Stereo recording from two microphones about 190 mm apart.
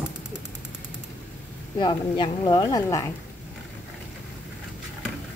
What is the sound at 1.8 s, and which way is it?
A woman's voice, 25° left (ahead or behind).